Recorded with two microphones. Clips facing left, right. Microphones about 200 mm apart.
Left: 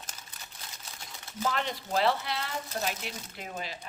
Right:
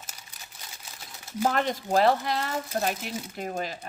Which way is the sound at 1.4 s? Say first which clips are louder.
Right 6 dB; 50° right (ahead or behind).